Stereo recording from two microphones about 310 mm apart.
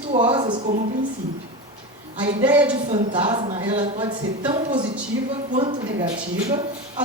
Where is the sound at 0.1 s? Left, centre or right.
Centre.